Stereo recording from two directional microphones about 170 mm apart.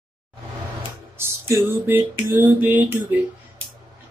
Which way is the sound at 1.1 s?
15° right (ahead or behind).